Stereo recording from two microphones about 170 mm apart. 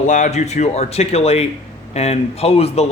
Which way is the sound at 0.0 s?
45° left (ahead or behind).